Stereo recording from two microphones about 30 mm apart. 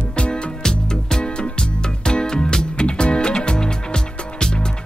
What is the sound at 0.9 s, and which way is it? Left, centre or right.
Music, left.